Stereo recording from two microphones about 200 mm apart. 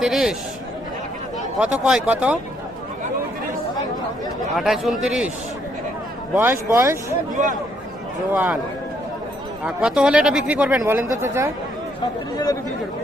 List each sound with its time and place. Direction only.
0.0 s speech: centre (ahead or behind)
1.5 s speech: 5° right (ahead or behind)
4.5 s speech: centre (ahead or behind)
6.3 s speech: 10° right (ahead or behind)
7.4 s speech: 40° right (ahead or behind)
8.3 s speech: 10° right (ahead or behind)
9.6 s speech: 5° right (ahead or behind)